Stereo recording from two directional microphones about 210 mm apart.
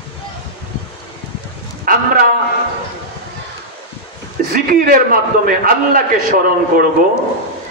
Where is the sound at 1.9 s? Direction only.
45° right (ahead or behind).